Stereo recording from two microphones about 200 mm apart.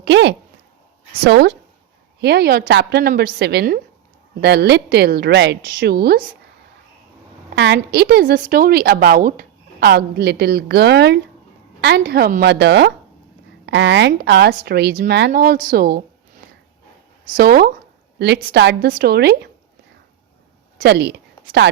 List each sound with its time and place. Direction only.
0.0 s a woman's voice: 60° right (ahead or behind)
7.5 s a woman's voice: 60° right (ahead or behind)
17.3 s a woman's voice: 50° right (ahead or behind)
20.7 s speech: 55° right (ahead or behind)